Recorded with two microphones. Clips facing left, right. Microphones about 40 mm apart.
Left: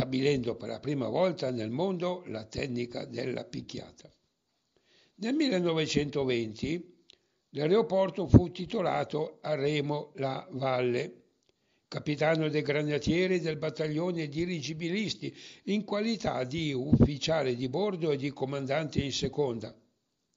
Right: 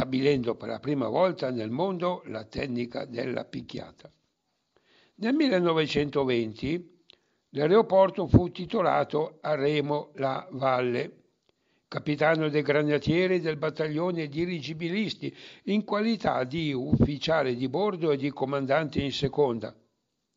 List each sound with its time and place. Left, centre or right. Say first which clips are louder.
0.0 s a man's voice: right 3 dB; centre
5.2 s a man's voice: right 4 dB; centre